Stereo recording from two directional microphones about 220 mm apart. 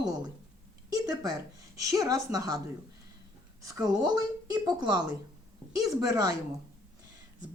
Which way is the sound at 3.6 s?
15° right (ahead or behind).